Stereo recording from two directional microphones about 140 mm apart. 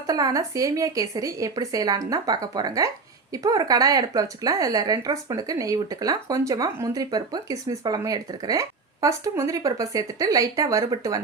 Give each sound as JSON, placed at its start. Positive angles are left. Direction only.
{"t": 0.1, "sound": "speech", "side_deg": -25}